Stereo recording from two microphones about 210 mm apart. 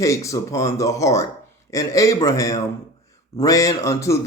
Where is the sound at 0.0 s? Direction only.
15° left (ahead or behind).